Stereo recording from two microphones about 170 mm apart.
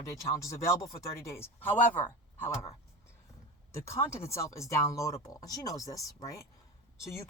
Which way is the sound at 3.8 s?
15° left (ahead or behind).